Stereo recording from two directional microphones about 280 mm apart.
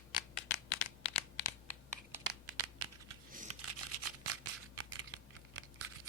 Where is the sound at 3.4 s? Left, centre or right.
Right.